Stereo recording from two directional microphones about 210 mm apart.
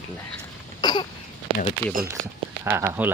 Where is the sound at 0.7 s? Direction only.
20° left (ahead or behind).